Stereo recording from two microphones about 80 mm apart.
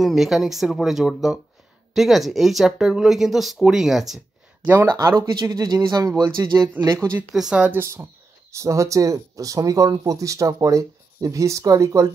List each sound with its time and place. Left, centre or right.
0.0 s speech: centre
4.8 s speech: right
6.2 s speech: right
7.3 s speech: centre
7.8 s speech: right